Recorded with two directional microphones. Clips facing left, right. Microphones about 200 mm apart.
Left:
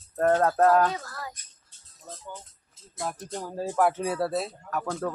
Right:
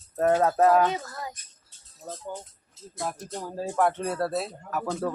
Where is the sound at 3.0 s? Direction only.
Centre (ahead or behind).